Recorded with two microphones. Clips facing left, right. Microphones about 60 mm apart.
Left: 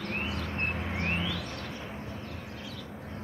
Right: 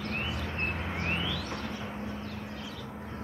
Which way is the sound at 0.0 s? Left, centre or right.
Left.